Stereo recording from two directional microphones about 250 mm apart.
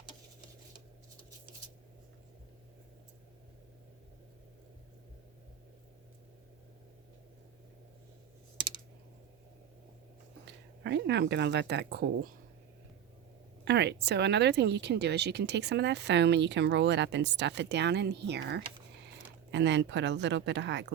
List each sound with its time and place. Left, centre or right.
10.4 s a woman's voice: right
13.7 s speech: right